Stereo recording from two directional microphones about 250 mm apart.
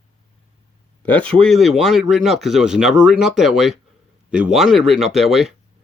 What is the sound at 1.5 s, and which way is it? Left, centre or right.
Speech, centre.